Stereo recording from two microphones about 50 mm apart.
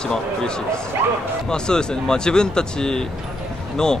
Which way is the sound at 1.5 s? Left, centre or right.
Centre.